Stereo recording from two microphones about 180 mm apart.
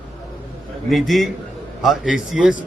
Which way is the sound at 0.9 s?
Centre (ahead or behind).